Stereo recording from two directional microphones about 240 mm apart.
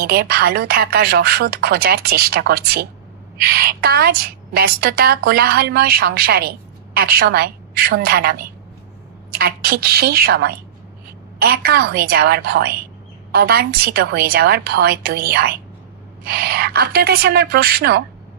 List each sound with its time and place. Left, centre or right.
0.0 s a woman's voice: right